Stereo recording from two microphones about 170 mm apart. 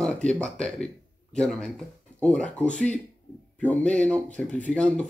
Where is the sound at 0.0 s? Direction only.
5° left (ahead or behind).